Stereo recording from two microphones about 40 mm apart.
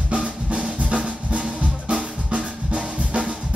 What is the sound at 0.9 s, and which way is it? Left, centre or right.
Music, right.